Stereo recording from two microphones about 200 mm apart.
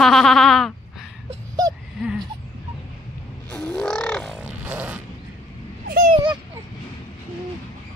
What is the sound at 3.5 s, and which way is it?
Music, 5° left (ahead or behind).